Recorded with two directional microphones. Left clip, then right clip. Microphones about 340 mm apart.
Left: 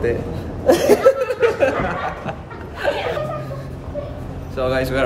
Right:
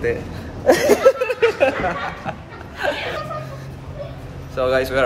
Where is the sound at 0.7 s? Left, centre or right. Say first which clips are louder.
Even; centre.